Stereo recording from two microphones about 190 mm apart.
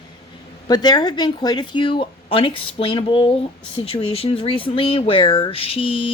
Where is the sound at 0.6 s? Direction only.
20° left (ahead or behind).